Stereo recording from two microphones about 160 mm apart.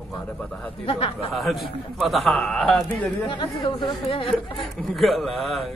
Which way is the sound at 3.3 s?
30° left (ahead or behind).